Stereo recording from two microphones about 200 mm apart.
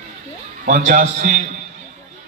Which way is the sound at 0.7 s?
40° right (ahead or behind).